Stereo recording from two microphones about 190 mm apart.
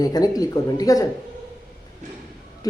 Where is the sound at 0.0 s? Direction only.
20° left (ahead or behind).